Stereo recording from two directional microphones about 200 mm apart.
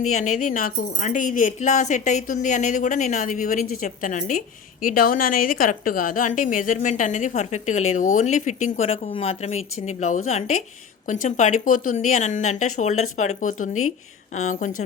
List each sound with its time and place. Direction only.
0.3 s a woman's voice: 45° left (ahead or behind)